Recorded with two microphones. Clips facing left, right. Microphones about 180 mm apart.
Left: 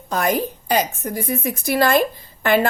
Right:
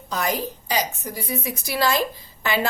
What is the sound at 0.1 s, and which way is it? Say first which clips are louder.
A woman's voice: left 5 dB; 55° left (ahead or behind).